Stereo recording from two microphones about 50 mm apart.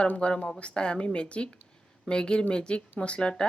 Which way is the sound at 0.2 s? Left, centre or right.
Left.